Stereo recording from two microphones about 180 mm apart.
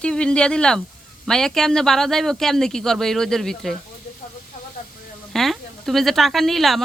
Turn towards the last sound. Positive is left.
turn(degrees=0)  # may be behind; listen again after turning